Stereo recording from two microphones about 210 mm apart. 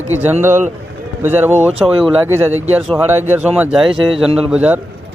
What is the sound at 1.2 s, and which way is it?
Speech, 10° right (ahead or behind).